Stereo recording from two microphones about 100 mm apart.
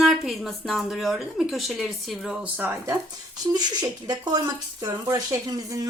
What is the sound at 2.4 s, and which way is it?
Speech, 15° right (ahead or behind).